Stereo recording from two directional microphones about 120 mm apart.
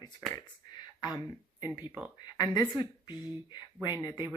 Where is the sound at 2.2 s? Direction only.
35° left (ahead or behind).